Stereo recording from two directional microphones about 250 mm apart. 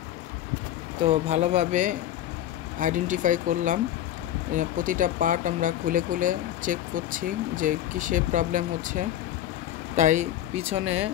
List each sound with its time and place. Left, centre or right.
1.0 s speech: right